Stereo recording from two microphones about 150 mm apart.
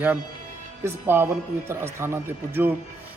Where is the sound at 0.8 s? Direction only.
15° right (ahead or behind).